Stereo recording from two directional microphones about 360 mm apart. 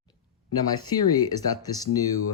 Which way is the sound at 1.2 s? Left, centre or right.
Centre.